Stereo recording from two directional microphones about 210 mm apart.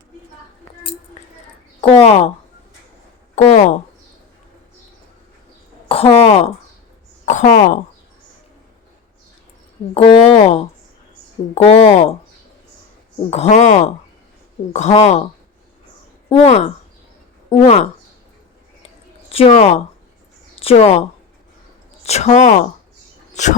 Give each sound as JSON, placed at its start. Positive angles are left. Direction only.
{"t": 1.8, "sound": "speech", "side_deg": 25}
{"t": 3.4, "sound": "a sound", "side_deg": 35}
{"t": 5.9, "sound": "speech", "side_deg": 30}
{"t": 9.9, "sound": "speech", "side_deg": 30}
{"t": 13.3, "sound": "speech", "side_deg": 30}
{"t": 16.3, "sound": "speech", "side_deg": 30}
{"t": 19.3, "sound": "a woman's voice", "side_deg": 30}
{"t": 22.0, "sound": "speech", "side_deg": 30}